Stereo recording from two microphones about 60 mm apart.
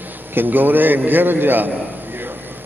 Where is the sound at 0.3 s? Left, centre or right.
Right.